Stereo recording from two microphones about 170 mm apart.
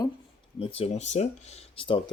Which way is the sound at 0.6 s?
35° left (ahead or behind).